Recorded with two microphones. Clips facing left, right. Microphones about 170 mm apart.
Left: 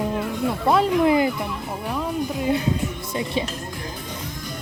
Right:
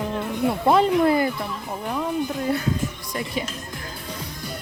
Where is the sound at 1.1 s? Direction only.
15° left (ahead or behind).